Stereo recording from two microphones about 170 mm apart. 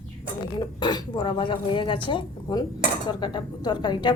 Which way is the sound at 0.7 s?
25° left (ahead or behind).